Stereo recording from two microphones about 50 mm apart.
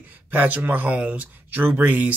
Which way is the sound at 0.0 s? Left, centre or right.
Right.